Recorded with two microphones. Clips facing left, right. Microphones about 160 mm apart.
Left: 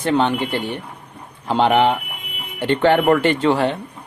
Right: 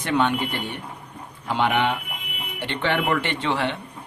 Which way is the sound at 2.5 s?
45° left (ahead or behind).